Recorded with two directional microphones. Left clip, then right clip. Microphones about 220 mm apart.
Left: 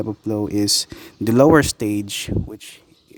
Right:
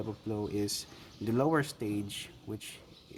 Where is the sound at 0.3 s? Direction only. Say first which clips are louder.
Left 15 dB; 45° left (ahead or behind).